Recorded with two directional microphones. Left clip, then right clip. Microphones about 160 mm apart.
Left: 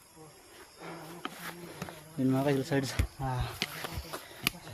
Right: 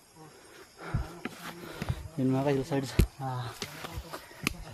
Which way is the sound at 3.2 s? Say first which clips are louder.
Left 1 dB; 30° left (ahead or behind).